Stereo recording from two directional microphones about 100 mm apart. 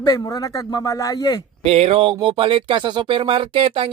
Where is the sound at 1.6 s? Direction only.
90° right; by 3.9 s 65° right (ahead or behind).